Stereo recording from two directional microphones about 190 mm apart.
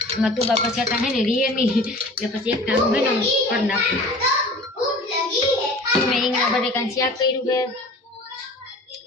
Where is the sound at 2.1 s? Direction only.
5° right (ahead or behind).